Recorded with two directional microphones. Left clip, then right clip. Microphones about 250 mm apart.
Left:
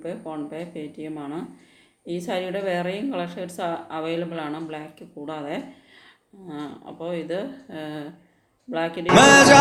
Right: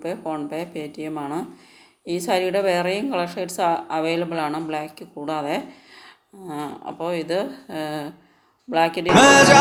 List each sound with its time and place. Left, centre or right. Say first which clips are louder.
0.0 s a woman's voice: right 5 dB; centre
7.0 s a woman's voice: right 4 dB; centre
9.1 s music: even; centre